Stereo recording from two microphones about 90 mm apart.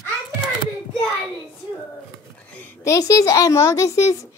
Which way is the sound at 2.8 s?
40° left (ahead or behind).